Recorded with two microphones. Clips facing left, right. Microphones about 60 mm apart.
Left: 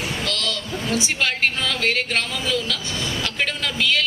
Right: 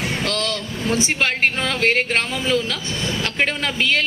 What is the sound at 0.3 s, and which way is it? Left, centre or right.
Speech, right.